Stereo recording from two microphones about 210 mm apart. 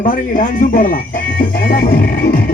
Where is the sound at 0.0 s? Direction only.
40° left (ahead or behind).